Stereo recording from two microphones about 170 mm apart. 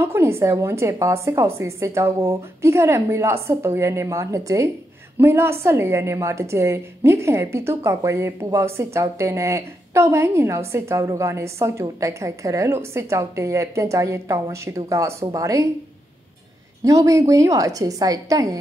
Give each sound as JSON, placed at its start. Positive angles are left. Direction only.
{"t": 0.0, "sound": "a woman's voice", "side_deg": -15}
{"t": 16.8, "sound": "a woman's voice", "side_deg": -20}